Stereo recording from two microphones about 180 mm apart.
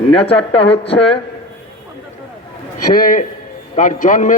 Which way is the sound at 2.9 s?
50° left (ahead or behind).